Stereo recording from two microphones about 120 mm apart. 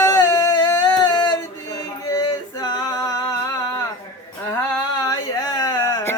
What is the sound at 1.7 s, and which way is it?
Male singing, 30° left (ahead or behind).